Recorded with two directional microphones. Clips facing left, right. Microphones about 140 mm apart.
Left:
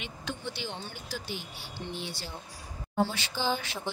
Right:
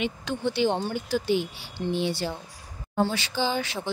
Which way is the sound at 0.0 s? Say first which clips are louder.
Right 10 dB; 70° right (ahead or behind).